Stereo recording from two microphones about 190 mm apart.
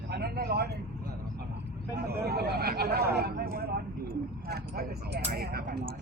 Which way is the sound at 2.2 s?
55° right (ahead or behind).